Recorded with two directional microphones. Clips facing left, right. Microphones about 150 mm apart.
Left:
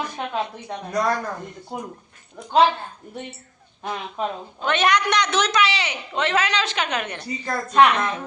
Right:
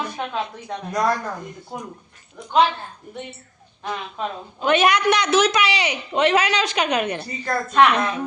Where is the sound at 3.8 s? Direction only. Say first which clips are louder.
Left 1 dB; 15° left (ahead or behind).